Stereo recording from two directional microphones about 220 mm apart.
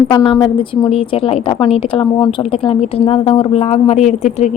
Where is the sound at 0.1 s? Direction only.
20° left (ahead or behind).